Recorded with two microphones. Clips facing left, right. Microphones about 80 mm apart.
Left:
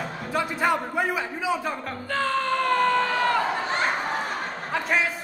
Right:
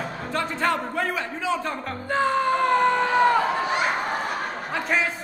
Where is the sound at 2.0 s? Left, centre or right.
Centre.